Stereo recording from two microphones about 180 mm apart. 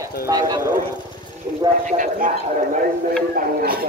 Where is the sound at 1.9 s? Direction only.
45° right (ahead or behind).